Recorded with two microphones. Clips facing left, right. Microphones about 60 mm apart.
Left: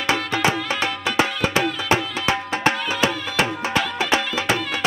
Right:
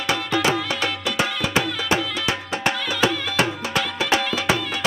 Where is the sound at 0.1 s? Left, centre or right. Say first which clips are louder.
Even; left.